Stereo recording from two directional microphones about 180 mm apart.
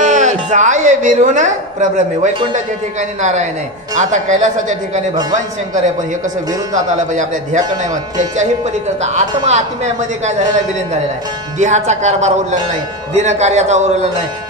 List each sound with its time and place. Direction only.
0.0 s a woman's voice: 40° right (ahead or behind)
6.7 s speech: 45° right (ahead or behind)
11.5 s speech: 40° right (ahead or behind)